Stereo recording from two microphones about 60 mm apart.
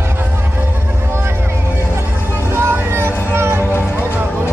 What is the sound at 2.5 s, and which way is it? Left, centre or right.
Music, right.